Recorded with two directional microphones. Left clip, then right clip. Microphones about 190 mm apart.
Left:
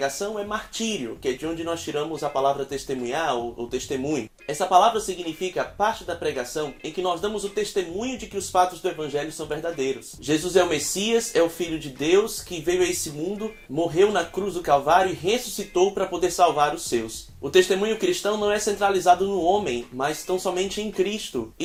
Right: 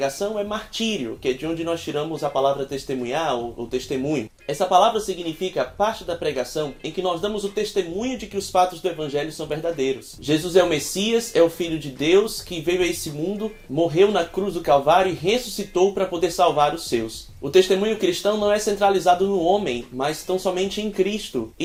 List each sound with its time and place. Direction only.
0.0 s speech: 30° left (ahead or behind)